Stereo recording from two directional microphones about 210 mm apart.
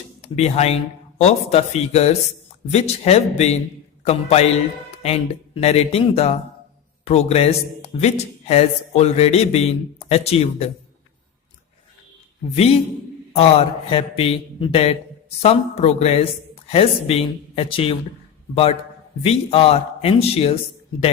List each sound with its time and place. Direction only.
0.3 s speech: 30° left (ahead or behind)
13.3 s speech: 30° left (ahead or behind)